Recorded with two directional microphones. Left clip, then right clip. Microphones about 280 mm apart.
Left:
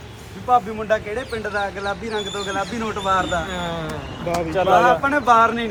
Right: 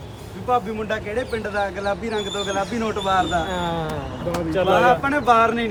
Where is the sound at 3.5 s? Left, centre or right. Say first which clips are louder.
Right 2 dB; centre.